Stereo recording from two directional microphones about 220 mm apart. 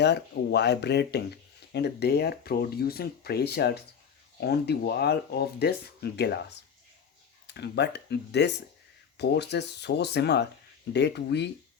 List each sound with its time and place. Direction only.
0.0 s speech: 50° left (ahead or behind)
7.4 s speech: 50° left (ahead or behind)